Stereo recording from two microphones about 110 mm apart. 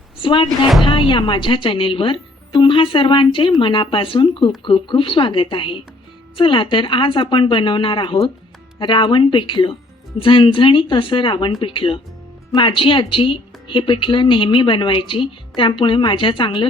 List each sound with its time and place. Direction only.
0.2 s speech: 50° left (ahead or behind)
0.4 s speech: centre (ahead or behind)
0.9 s a woman's voice: 50° left (ahead or behind)